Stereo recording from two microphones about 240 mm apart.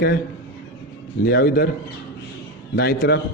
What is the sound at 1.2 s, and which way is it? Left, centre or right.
Speech, left.